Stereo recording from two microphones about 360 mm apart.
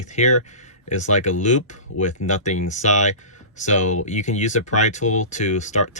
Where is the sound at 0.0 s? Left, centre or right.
Centre.